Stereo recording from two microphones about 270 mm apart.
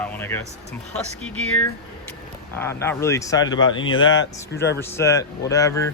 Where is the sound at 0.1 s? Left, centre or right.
Centre.